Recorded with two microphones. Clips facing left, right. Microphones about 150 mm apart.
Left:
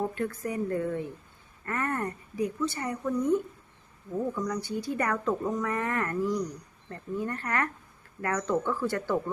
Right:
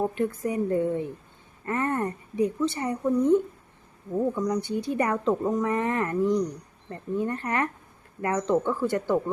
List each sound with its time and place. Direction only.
0.0 s speech: 20° right (ahead or behind)